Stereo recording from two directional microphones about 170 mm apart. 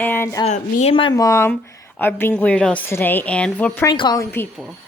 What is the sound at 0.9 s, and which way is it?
A woman's voice, 25° left (ahead or behind).